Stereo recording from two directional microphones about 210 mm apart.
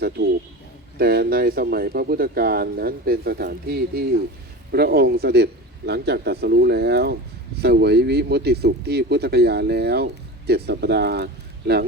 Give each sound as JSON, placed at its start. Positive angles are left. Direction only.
{"t": 0.2, "sound": "speech", "side_deg": -50}